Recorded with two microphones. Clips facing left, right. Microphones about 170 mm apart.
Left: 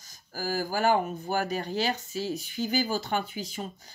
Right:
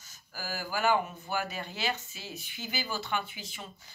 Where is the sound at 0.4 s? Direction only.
40° left (ahead or behind).